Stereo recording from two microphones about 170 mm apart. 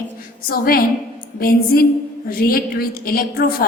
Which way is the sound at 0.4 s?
60° left (ahead or behind).